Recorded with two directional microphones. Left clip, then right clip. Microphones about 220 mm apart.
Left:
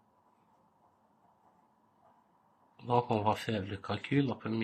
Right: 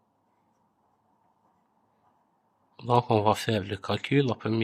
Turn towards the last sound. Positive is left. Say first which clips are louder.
# right 7 dB
turn(degrees=-50)  # may be behind; listen again after turning